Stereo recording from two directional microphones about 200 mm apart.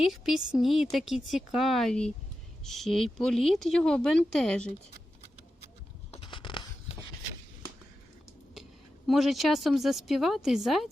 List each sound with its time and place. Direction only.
0.0 s a woman's voice: centre (ahead or behind)
6.1 s a sound: 25° left (ahead or behind)
9.0 s a woman's voice: centre (ahead or behind)